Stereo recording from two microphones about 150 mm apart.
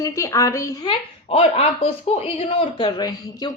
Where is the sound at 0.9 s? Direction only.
40° left (ahead or behind).